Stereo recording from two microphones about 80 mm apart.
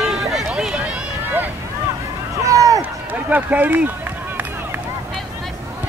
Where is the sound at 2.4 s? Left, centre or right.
Right.